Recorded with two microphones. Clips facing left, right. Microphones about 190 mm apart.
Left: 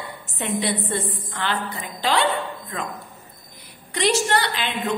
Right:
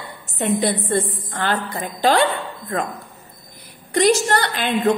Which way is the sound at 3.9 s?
45° right (ahead or behind).